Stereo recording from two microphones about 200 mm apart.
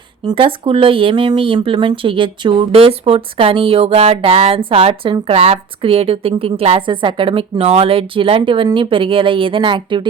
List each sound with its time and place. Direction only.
0.3 s speech: 25° right (ahead or behind)